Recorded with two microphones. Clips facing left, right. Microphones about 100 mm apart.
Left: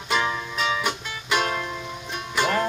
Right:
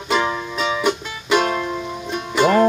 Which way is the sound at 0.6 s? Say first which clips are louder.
Right 6 dB; centre (ahead or behind).